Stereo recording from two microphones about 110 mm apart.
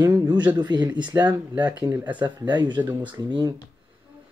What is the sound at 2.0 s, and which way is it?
Speech, 45° right (ahead or behind).